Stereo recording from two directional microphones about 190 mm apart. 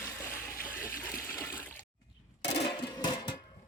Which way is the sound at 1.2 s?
15° left (ahead or behind).